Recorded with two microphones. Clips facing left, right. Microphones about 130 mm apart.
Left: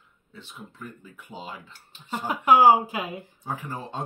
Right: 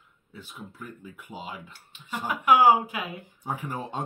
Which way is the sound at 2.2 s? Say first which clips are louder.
Left 2 dB; 30° left (ahead or behind).